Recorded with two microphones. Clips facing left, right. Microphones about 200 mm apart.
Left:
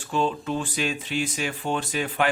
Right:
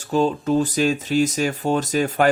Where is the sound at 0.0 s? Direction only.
40° right (ahead or behind).